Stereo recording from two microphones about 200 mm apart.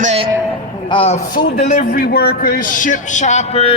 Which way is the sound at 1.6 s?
40° left (ahead or behind).